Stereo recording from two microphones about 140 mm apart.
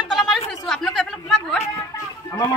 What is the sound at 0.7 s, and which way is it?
Chatter, centre (ahead or behind).